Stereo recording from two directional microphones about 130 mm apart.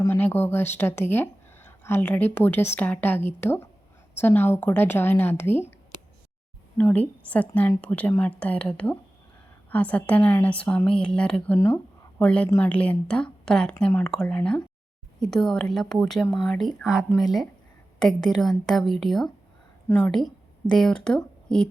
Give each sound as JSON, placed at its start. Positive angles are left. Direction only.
{"t": 0.0, "sound": "a woman's voice", "side_deg": 20}
{"t": 6.7, "sound": "a woman's voice", "side_deg": 10}